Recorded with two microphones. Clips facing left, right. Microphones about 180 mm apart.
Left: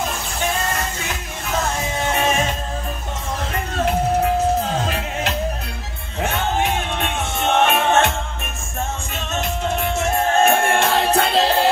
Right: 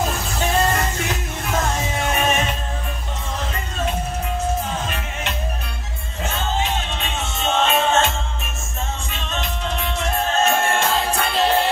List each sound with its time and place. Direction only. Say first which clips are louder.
3.5 s music: left 7 dB; 70° left (ahead or behind)
6.2 s music: left 3 dB; 60° left (ahead or behind)
9.1 s music: left 3 dB; 45° left (ahead or behind); by 11.7 s 70° left (ahead or behind)